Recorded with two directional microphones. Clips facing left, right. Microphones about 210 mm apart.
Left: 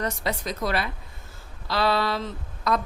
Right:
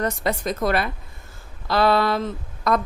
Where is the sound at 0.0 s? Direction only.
50° right (ahead or behind).